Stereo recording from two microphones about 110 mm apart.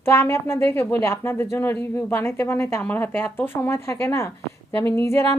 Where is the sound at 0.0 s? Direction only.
25° left (ahead or behind).